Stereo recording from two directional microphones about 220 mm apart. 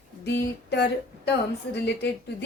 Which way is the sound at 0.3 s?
50° left (ahead or behind).